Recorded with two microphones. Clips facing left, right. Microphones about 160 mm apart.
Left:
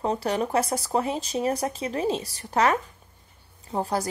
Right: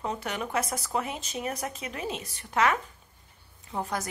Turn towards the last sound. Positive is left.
turn(degrees=35)  # may be behind; listen again after turning